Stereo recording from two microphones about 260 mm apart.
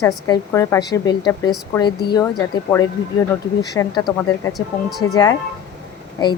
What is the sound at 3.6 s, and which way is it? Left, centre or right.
Speech, centre.